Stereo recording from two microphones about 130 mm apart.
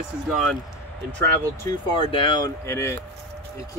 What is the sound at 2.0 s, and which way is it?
Speech, 40° left (ahead or behind).